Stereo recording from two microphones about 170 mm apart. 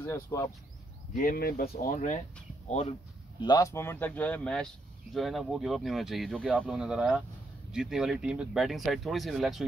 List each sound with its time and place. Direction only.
0.0 s speech: 15° left (ahead or behind)
1.1 s speech: 55° left (ahead or behind)
3.3 s speech: 25° left (ahead or behind); by 9.7 s centre (ahead or behind)